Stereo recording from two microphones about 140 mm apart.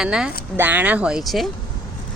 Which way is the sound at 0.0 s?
5° right (ahead or behind).